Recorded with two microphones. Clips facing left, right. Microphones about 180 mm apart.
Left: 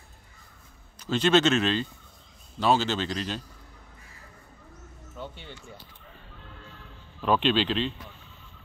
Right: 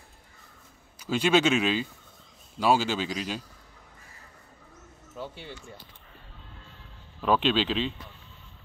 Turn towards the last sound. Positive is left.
turn(degrees=-5)  # may be behind; listen again after turning